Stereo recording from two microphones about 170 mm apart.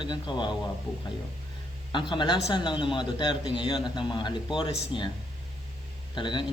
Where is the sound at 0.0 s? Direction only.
25° left (ahead or behind).